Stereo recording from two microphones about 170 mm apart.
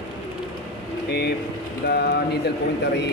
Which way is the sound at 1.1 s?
75° left (ahead or behind).